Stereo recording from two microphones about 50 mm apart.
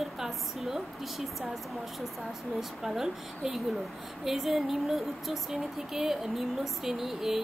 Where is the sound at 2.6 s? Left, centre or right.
Centre.